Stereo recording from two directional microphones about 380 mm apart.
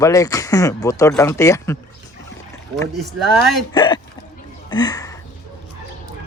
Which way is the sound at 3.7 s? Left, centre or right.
Centre.